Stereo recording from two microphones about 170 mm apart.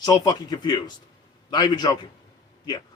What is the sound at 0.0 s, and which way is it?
Speech, 25° left (ahead or behind).